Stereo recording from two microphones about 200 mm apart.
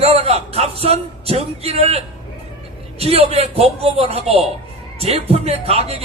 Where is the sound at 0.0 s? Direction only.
30° right (ahead or behind).